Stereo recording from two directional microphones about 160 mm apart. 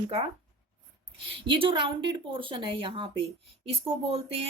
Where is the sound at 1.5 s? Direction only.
30° right (ahead or behind).